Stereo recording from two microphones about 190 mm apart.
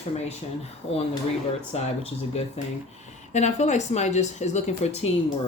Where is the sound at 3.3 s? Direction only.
40° left (ahead or behind).